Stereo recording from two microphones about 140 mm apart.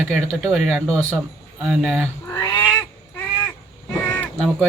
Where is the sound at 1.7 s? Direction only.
10° right (ahead or behind).